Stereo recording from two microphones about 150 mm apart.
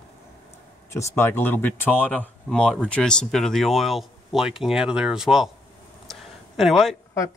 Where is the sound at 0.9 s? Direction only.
20° left (ahead or behind); by 5.5 s 5° right (ahead or behind).